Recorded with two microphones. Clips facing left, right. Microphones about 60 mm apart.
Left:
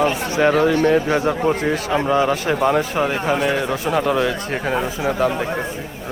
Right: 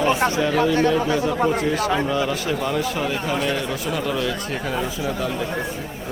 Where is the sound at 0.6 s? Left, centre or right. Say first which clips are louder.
Left 3 dB; left.